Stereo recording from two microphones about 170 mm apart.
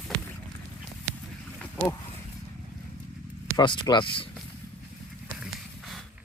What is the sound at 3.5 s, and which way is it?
Speech, 25° left (ahead or behind).